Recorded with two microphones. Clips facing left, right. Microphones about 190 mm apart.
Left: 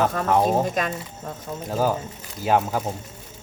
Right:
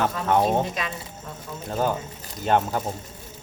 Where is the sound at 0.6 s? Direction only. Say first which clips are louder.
Left 4 dB; 45° left (ahead or behind).